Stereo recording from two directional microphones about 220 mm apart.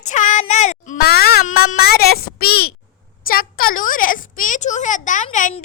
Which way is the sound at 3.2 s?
40° left (ahead or behind).